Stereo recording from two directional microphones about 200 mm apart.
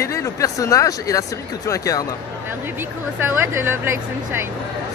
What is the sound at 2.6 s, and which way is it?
Speech, 10° right (ahead or behind).